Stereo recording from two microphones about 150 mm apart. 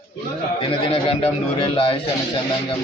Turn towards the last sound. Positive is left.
turn(degrees=35)  # may be behind; listen again after turning